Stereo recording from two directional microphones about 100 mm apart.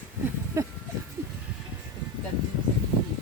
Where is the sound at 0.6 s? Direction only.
30° right (ahead or behind).